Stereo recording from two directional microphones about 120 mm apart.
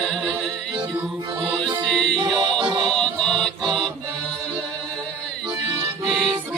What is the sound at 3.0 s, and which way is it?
Mantra, 5° left (ahead or behind).